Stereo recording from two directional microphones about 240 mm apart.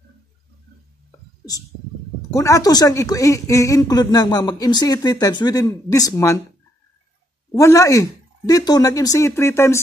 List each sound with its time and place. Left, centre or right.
2.3 s speech: centre
7.5 s speech: centre